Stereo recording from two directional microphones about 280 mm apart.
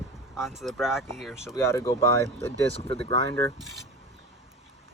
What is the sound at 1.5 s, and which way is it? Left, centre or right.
Speech, centre.